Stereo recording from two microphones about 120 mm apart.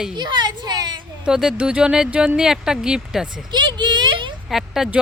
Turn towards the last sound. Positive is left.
turn(degrees=-5)  # may be behind; listen again after turning